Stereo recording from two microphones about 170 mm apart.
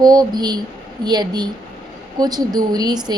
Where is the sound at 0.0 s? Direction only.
25° right (ahead or behind).